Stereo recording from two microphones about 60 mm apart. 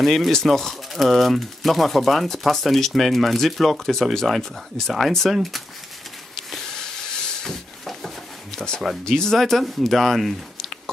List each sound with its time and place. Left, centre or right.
0.0 s speech: centre
6.3 s a sound: centre
8.5 s speech: centre